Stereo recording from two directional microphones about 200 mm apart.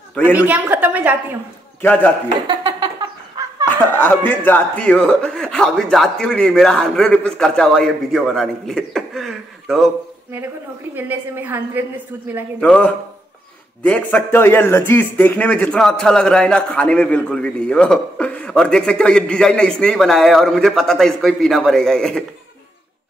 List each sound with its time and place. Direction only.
0.3 s a woman's voice: 10° right (ahead or behind)
1.8 s a man's voice: 10° left (ahead or behind)
2.6 s a sound: 20° right (ahead or behind)
3.6 s a man's voice: 10° left (ahead or behind)
11.0 s a woman's voice: 10° right (ahead or behind)
12.5 s a man's voice: 5° left (ahead or behind)